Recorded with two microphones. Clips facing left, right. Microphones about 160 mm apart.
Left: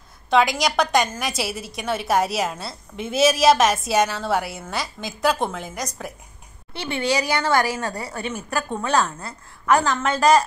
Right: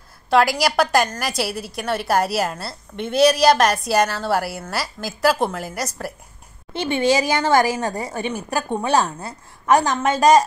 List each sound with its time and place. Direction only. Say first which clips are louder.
0.3 s a woman's voice: right 2 dB; 5° right (ahead or behind)
6.7 s a woman's voice: right 5 dB; 20° right (ahead or behind)